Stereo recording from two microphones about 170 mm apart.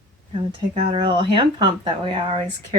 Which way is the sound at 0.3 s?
35° right (ahead or behind).